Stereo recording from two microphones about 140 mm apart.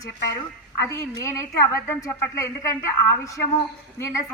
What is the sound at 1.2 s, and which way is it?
A woman's voice, 20° left (ahead or behind).